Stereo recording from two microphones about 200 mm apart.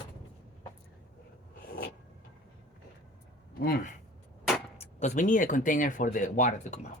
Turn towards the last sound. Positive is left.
turn(degrees=35)  # may be behind; listen again after turning